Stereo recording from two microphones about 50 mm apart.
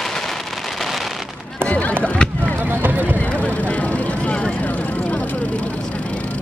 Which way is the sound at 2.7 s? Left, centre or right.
Right.